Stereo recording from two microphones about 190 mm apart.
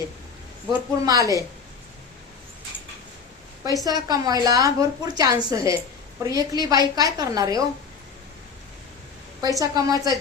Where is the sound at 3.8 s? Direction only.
20° right (ahead or behind).